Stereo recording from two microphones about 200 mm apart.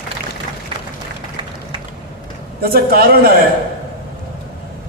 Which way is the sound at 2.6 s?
50° right (ahead or behind).